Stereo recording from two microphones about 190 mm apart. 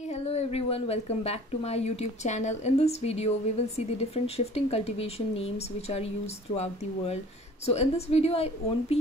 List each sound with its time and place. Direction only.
0.1 s a woman's voice: 35° left (ahead or behind)